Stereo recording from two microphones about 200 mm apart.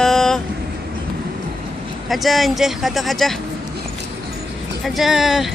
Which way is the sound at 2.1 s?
Centre (ahead or behind).